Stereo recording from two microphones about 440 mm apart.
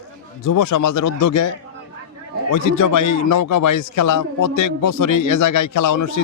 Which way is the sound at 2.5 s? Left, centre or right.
Left.